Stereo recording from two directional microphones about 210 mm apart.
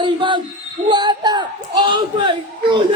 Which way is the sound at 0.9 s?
20° right (ahead or behind).